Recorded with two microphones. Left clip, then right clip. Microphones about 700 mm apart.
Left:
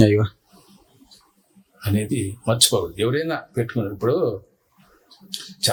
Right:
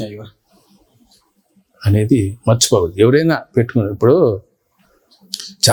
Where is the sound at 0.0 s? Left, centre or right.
Left.